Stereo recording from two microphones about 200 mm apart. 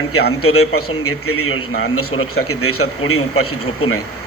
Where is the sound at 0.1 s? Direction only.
90° left.